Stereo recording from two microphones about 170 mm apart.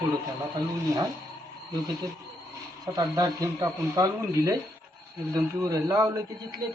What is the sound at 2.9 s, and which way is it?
Speech, 20° right (ahead or behind).